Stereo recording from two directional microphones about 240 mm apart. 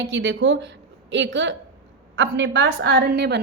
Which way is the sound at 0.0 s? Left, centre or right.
Right.